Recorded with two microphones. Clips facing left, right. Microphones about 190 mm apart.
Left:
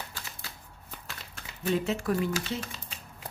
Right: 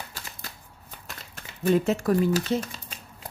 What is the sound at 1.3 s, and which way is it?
Speech, 45° right (ahead or behind).